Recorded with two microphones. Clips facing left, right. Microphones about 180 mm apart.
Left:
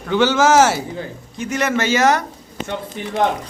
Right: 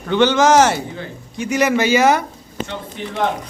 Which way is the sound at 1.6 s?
15° right (ahead or behind).